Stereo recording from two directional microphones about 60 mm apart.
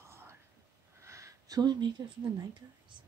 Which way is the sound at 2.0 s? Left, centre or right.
Right.